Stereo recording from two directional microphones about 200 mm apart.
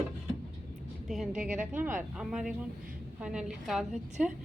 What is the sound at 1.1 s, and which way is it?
Speech, centre (ahead or behind).